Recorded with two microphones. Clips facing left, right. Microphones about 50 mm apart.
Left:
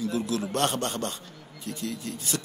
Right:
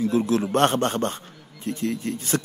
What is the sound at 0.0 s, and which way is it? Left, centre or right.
A man's voice, right.